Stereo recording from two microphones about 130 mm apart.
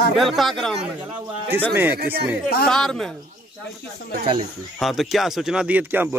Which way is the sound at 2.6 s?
5° left (ahead or behind).